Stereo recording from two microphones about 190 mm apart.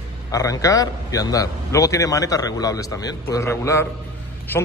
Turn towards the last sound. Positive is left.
turn(degrees=10)  # may be behind; listen again after turning